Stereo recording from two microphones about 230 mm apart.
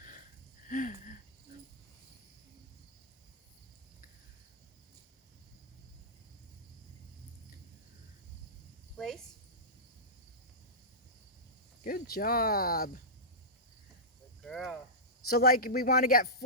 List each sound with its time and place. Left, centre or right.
0.7 s a sound: left
11.8 s speech: left
14.4 s cricket: centre
15.3 s speech: left